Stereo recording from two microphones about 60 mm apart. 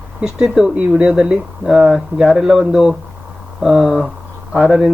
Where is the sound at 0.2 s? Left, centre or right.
Centre.